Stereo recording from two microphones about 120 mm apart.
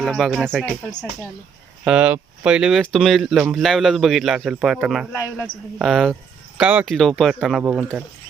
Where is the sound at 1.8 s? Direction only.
10° right (ahead or behind).